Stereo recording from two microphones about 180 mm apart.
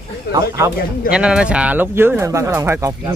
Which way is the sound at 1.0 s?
5° right (ahead or behind).